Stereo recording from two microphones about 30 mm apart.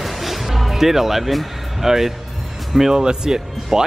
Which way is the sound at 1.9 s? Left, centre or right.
Centre.